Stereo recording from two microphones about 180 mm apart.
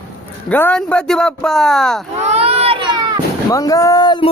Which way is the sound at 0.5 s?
10° left (ahead or behind).